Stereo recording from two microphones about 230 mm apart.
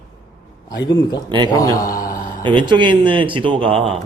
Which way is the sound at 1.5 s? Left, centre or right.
Centre.